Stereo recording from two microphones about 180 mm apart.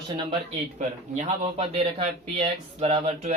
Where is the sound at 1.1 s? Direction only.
35° right (ahead or behind).